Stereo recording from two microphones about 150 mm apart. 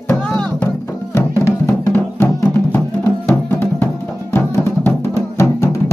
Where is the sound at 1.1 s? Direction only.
20° left (ahead or behind).